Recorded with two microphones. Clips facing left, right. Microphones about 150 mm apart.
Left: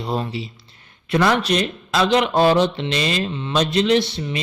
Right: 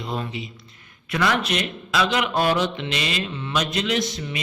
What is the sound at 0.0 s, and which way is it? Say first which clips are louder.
A man's voice: left 5 dB; 35° left (ahead or behind).